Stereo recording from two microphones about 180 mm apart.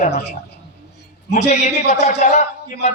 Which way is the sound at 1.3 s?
40° left (ahead or behind).